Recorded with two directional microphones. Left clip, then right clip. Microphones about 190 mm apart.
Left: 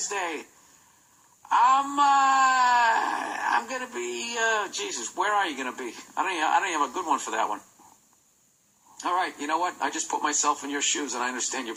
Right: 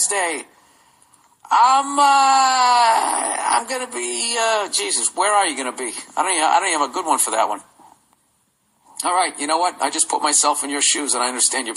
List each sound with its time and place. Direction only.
0.0 s speech: 40° right (ahead or behind)
1.5 s speech: 40° right (ahead or behind)
9.0 s speech: 40° right (ahead or behind)